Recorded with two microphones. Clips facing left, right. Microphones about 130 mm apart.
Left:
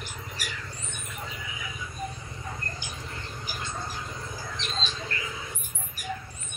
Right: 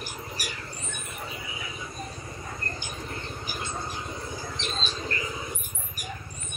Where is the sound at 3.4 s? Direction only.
20° right (ahead or behind).